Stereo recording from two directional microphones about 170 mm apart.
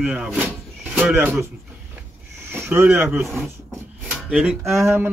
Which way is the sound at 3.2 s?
Centre (ahead or behind).